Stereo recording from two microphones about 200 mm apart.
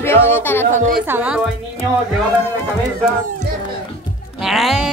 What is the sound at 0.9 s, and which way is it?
Speech, 10° right (ahead or behind).